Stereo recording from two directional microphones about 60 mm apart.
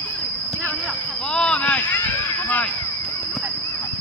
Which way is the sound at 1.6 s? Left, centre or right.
Left.